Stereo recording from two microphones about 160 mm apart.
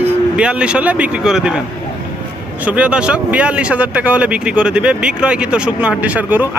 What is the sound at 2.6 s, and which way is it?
Speech, 10° right (ahead or behind).